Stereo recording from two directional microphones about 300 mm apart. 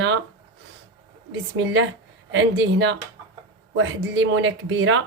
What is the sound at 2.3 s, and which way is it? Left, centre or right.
Speech, right.